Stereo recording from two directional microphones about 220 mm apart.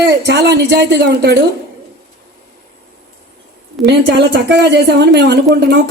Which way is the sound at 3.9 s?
50° right (ahead or behind).